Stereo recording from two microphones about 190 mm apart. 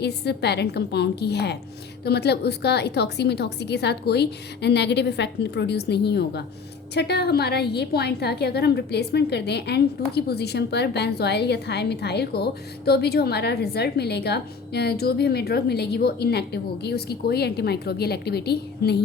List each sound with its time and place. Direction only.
0.0 s a woman's voice: 60° left (ahead or behind)